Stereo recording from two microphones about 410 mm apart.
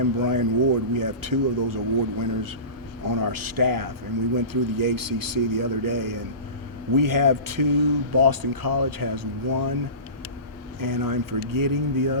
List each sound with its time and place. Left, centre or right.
0.0 s speech: right
10.8 s speech: right